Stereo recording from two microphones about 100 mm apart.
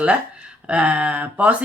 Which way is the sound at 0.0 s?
10° right (ahead or behind).